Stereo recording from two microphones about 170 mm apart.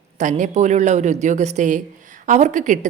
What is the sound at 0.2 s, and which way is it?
A woman's voice, 45° right (ahead or behind).